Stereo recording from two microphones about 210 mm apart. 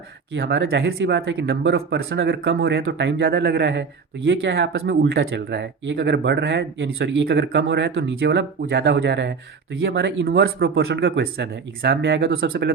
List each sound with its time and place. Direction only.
0.3 s speech: 50° right (ahead or behind)